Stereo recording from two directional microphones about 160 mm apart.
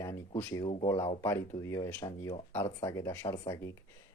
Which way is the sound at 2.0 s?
25° left (ahead or behind).